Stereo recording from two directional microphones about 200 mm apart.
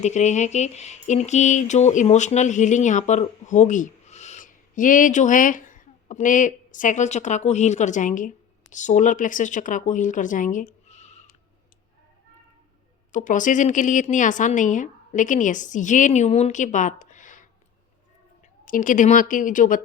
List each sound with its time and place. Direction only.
0.0 s speech: 35° left (ahead or behind)
13.1 s speech: 40° left (ahead or behind)
18.6 s speech: 40° left (ahead or behind)